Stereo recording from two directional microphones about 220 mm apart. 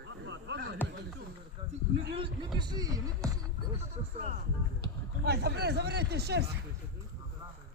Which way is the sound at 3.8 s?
30° right (ahead or behind).